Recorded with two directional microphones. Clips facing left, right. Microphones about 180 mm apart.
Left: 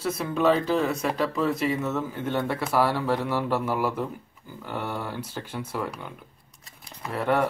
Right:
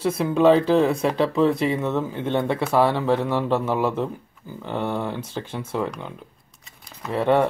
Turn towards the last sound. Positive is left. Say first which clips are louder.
# right 5 dB
turn(degrees=-25)  # may be behind; listen again after turning